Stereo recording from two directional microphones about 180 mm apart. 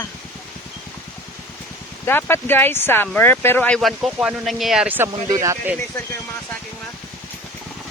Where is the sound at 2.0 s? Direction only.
10° left (ahead or behind); by 5.8 s 15° right (ahead or behind).